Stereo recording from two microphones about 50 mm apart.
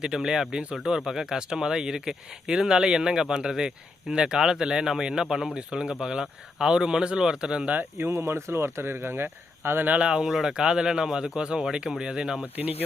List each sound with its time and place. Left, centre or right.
0.0 s speech: centre
7.9 s speech: right
10.2 s speech: centre